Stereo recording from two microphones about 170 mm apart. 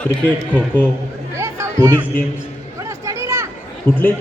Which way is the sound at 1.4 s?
15° right (ahead or behind).